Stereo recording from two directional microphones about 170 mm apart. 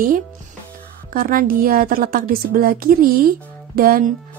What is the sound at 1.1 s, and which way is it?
A woman's voice, 55° right (ahead or behind).